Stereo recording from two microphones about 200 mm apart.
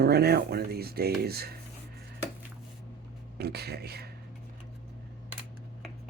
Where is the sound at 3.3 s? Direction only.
55° right (ahead or behind).